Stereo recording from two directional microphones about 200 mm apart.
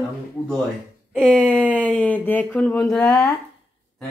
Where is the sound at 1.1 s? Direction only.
5° left (ahead or behind).